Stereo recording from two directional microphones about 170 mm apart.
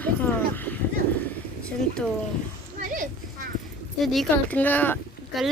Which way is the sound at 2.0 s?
5° left (ahead or behind).